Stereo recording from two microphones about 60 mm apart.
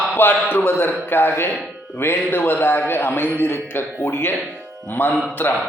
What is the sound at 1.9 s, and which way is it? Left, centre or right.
Speech, left.